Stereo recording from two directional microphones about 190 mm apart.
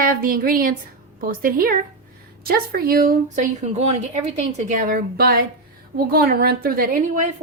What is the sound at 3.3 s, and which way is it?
A woman's voice, 35° right (ahead or behind).